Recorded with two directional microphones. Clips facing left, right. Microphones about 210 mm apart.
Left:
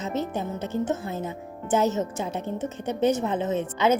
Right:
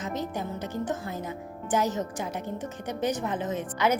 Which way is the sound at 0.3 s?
25° left (ahead or behind).